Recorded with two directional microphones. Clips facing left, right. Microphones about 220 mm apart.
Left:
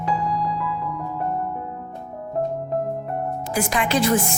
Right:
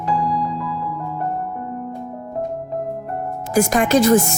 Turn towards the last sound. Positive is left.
turn(degrees=-45)  # may be behind; listen again after turning